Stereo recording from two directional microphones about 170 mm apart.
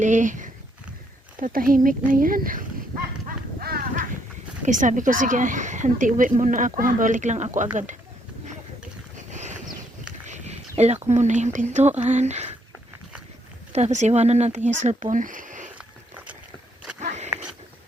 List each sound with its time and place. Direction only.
0.0 s speech: 45° right (ahead or behind)
3.2 s a sound: 60° right (ahead or behind)
4.6 s a woman's voice: 50° right (ahead or behind)
9.1 s boat: 45° right (ahead or behind)
10.2 s speech: 45° right (ahead or behind)
13.7 s a woman's voice: 40° right (ahead or behind)
17.0 s a sound: 45° right (ahead or behind)